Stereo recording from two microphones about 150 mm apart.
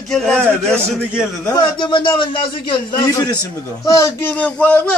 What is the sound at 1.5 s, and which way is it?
Speech, 30° left (ahead or behind).